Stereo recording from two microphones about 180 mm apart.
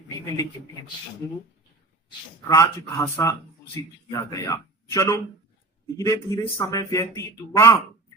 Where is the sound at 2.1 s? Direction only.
20° left (ahead or behind).